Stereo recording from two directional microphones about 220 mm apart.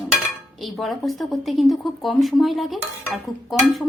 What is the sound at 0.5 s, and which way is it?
Speech, centre (ahead or behind).